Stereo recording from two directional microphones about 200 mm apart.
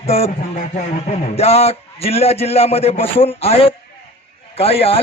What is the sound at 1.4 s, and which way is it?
A man's voice, 30° left (ahead or behind).